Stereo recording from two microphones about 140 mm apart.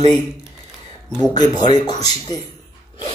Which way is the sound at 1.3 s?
30° left (ahead or behind).